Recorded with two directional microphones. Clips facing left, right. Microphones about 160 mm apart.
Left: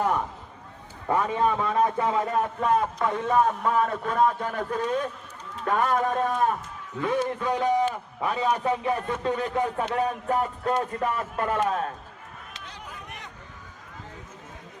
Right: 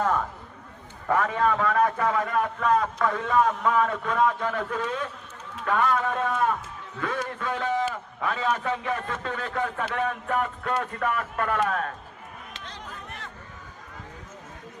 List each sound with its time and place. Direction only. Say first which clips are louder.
1.1 s a man's voice: even; 20° left (ahead or behind); by 6.5 s 40° left (ahead or behind)
7.0 s a man's voice: left 4 dB; 20° left (ahead or behind)
12.5 s a sound: right 1 dB; 10° left (ahead or behind)